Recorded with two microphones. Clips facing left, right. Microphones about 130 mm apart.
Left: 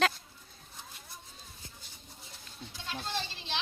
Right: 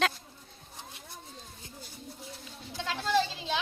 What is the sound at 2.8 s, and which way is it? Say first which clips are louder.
Children playing: right 10 dB; 90° right.